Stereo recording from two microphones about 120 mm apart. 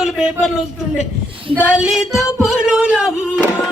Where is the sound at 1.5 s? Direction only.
5° right (ahead or behind).